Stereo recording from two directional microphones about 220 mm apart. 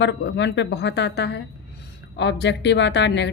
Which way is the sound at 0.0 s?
55° left (ahead or behind).